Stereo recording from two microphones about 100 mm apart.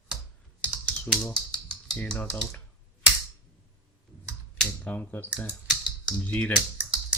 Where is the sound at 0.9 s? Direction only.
10° left (ahead or behind).